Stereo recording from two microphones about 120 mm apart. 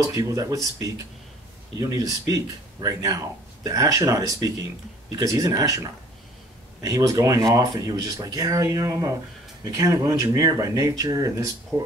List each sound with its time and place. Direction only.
0.1 s speech: 30° right (ahead or behind)